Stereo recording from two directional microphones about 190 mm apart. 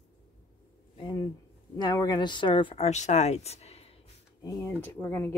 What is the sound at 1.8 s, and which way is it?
Speech, 20° left (ahead or behind).